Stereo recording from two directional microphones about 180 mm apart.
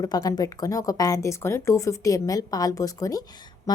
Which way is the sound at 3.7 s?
20° left (ahead or behind).